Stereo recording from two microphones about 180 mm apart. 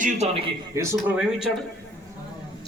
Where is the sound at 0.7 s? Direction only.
15° right (ahead or behind).